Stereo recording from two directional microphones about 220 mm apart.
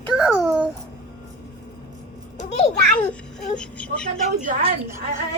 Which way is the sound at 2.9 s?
5° left (ahead or behind).